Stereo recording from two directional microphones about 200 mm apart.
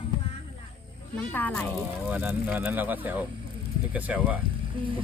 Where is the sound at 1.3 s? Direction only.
10° left (ahead or behind).